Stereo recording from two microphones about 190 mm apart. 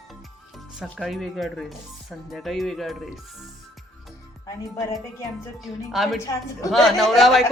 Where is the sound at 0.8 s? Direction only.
Centre (ahead or behind).